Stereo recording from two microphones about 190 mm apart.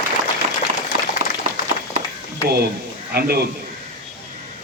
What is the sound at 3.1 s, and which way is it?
Speech, 55° right (ahead or behind).